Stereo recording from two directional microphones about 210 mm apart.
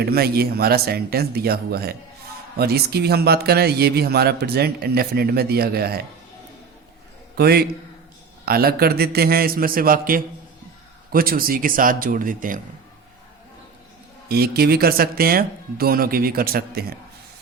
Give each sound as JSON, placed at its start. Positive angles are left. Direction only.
{"t": 0.0, "sound": "a man's voice", "side_deg": -45}
{"t": 7.3, "sound": "a man's voice", "side_deg": -50}
{"t": 14.3, "sound": "a man's voice", "side_deg": -50}